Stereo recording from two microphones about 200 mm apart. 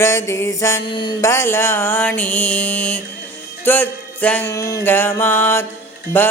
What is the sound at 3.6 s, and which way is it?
Music, 10° left (ahead or behind).